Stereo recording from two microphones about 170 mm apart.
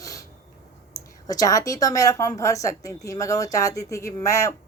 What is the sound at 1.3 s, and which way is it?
A woman's voice, 20° left (ahead or behind).